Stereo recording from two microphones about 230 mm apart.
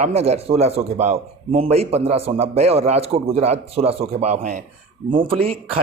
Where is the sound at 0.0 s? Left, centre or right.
Right.